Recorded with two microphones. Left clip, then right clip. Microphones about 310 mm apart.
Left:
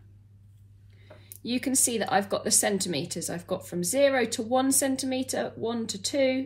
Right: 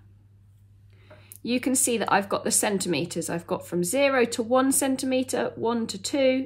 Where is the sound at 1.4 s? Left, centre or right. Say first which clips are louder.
Right 3 dB; centre.